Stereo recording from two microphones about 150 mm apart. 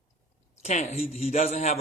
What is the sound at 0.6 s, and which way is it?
Speech, 50° left (ahead or behind).